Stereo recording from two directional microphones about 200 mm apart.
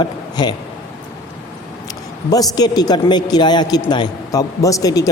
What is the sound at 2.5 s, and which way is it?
Speech, 20° left (ahead or behind).